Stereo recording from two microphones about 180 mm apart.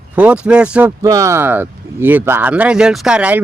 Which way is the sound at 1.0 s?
20° right (ahead or behind).